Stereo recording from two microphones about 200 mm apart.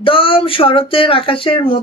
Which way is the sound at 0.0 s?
25° left (ahead or behind).